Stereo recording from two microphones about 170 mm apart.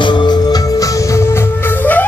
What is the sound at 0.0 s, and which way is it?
Music, 25° left (ahead or behind).